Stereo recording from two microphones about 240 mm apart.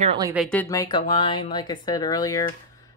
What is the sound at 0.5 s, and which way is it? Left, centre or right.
Speech, centre.